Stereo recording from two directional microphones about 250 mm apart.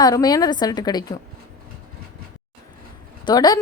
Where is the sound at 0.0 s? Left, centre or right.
Centre.